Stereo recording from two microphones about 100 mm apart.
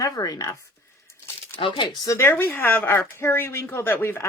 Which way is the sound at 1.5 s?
55° left (ahead or behind).